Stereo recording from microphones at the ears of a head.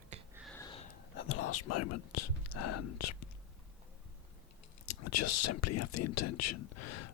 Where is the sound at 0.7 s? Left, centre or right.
Left.